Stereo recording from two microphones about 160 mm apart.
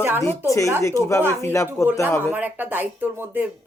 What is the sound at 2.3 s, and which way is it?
A woman's voice, 10° right (ahead or behind).